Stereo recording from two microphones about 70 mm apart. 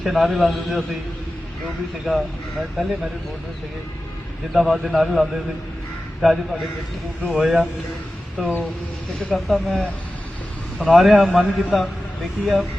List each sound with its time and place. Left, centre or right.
0.0 s a man's voice: centre
2.0 s a man's voice: centre
4.5 s a man's voice: centre